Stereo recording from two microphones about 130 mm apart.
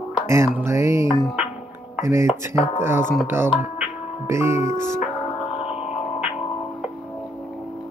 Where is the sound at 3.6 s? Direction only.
15° right (ahead or behind).